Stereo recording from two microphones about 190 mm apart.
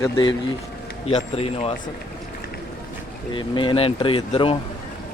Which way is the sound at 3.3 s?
25° left (ahead or behind).